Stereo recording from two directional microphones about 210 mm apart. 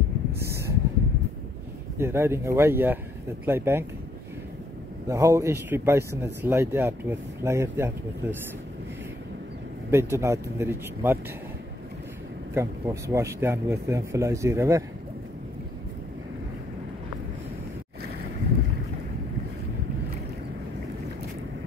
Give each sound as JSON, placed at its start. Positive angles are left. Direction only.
{"t": 0.4, "sound": "a sound", "side_deg": -15}
{"t": 2.0, "sound": "speech", "side_deg": -10}
{"t": 5.0, "sound": "speech", "side_deg": -15}
{"t": 9.8, "sound": "speech", "side_deg": -10}
{"t": 12.5, "sound": "speech", "side_deg": -15}